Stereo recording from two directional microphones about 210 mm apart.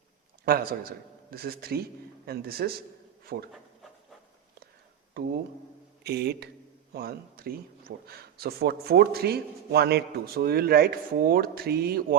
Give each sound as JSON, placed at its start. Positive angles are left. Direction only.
{"t": 0.4, "sound": "a man's voice", "side_deg": -45}
{"t": 5.2, "sound": "a man's voice", "side_deg": -45}